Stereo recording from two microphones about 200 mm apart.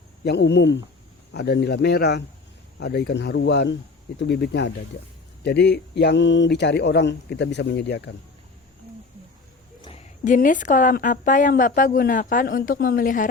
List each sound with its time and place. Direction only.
0.3 s speech: 60° left (ahead or behind)
10.2 s a woman's voice: 40° left (ahead or behind)